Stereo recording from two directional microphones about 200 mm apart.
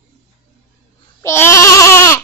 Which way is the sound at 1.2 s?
15° left (ahead or behind).